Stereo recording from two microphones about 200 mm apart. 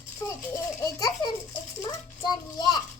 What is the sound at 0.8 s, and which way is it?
Speech, 15° left (ahead or behind).